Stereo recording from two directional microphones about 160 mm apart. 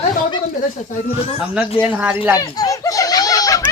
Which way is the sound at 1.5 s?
10° right (ahead or behind).